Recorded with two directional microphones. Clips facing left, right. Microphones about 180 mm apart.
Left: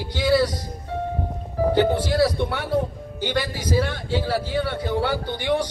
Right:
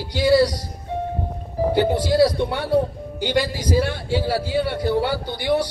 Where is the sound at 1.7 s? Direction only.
10° right (ahead or behind).